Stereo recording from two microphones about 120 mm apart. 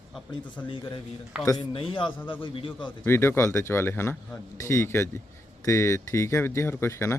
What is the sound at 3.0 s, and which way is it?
Speech, 20° left (ahead or behind).